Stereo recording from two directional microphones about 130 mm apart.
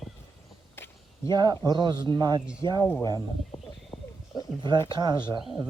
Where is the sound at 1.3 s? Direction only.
35° right (ahead or behind).